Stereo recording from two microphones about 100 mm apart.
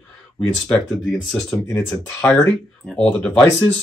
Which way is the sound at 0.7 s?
5° left (ahead or behind).